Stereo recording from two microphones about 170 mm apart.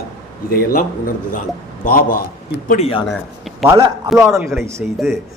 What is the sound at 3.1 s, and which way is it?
Speech, centre (ahead or behind).